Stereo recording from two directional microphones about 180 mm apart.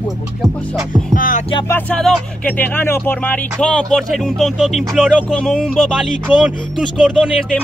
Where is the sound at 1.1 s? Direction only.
45° left (ahead or behind).